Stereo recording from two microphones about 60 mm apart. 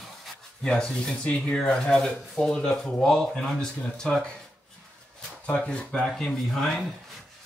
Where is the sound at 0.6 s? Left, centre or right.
Centre.